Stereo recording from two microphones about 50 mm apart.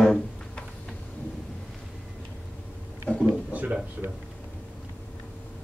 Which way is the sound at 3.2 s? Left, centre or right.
Right.